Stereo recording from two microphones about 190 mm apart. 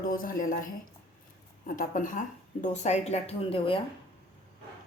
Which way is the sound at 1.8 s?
45° left (ahead or behind).